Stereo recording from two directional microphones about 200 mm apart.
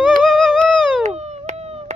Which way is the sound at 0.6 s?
35° right (ahead or behind).